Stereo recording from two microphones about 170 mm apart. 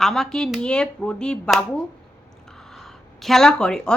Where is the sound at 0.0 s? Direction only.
Centre (ahead or behind).